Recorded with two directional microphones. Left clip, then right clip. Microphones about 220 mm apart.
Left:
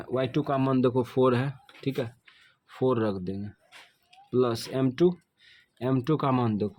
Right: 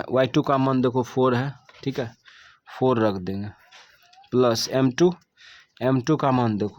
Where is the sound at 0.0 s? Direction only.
30° right (ahead or behind).